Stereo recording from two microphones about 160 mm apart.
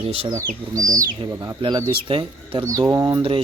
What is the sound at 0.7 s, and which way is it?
Speech, 20° right (ahead or behind).